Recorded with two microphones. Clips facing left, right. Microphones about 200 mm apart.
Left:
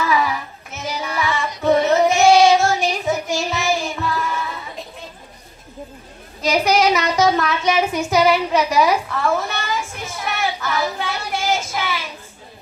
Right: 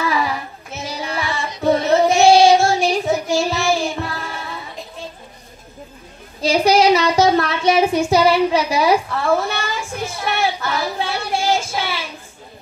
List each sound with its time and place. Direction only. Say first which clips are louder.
0.0 s child singing: left 1 dB; 30° right (ahead or behind)
6.4 s child singing: right 3 dB; 30° right (ahead or behind)